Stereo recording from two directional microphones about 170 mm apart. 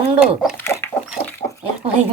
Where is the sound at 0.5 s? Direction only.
15° left (ahead or behind).